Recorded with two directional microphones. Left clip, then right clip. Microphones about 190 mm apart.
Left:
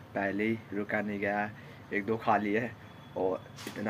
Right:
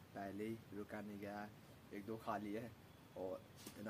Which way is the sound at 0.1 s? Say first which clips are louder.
Left 17 dB; 10° right (ahead or behind).